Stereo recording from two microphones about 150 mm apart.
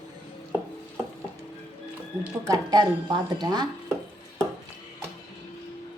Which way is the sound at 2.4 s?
25° right (ahead or behind).